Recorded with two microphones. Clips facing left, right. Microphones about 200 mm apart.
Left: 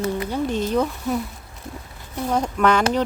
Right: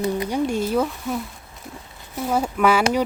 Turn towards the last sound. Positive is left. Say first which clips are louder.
# even
turn(degrees=-10)  # may be behind; listen again after turning